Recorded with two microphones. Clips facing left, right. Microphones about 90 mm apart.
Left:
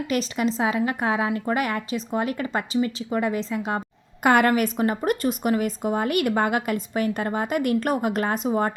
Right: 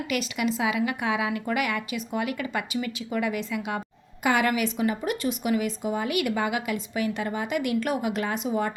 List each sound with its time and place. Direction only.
0.1 s a woman's voice: 35° left (ahead or behind)
4.2 s a woman's voice: 50° left (ahead or behind)